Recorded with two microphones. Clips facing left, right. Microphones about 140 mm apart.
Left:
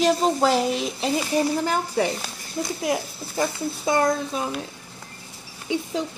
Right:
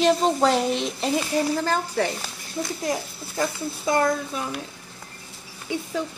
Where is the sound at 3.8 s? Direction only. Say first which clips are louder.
Left 1 dB; 25° left (ahead or behind).